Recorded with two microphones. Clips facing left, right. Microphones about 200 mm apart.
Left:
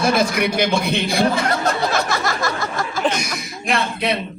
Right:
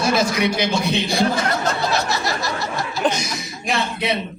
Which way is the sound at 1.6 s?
50° left (ahead or behind).